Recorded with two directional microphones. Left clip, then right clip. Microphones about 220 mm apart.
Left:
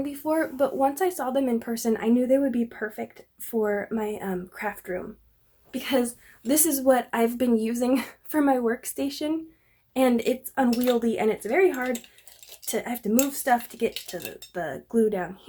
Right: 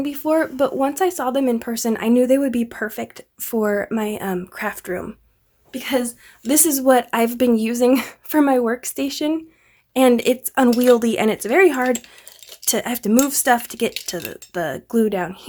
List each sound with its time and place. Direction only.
0.0 s speech: 30° right (ahead or behind)
5.7 s speech: 20° right (ahead or behind)